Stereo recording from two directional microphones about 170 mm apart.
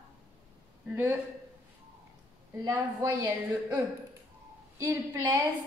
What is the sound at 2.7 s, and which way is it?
Speech, 20° right (ahead or behind).